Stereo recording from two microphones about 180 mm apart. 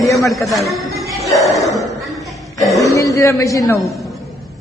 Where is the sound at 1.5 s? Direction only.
20° left (ahead or behind).